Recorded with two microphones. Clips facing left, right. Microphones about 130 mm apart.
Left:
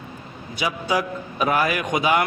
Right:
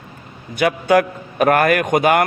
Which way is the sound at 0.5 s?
60° right (ahead or behind).